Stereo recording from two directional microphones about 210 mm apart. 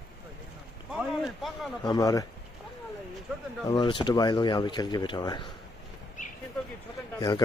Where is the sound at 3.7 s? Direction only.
20° left (ahead or behind).